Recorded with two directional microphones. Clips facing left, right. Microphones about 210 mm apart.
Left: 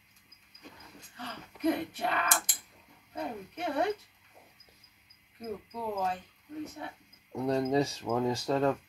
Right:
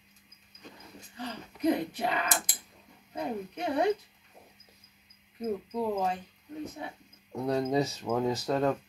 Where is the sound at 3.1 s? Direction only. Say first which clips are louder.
Right 3 dB; 15° right (ahead or behind).